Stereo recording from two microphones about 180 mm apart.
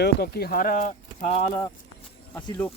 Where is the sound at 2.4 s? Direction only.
10° left (ahead or behind).